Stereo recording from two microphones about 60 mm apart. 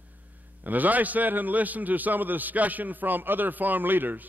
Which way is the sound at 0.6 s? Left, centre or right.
Right.